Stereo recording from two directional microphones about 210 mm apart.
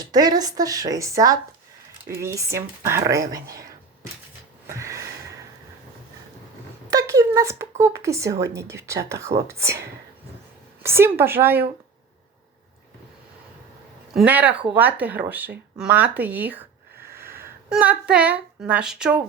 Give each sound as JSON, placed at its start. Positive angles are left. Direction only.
{"t": 0.0, "sound": "speech", "side_deg": -20}
{"t": 4.7, "sound": "a sound", "side_deg": -15}
{"t": 6.9, "sound": "speech", "side_deg": -15}
{"t": 10.8, "sound": "speech", "side_deg": -10}
{"t": 14.3, "sound": "a woman's voice", "side_deg": -10}